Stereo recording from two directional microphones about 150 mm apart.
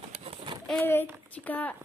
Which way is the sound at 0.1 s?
45° right (ahead or behind).